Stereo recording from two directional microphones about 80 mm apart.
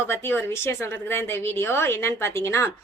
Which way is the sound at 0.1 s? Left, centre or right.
Left.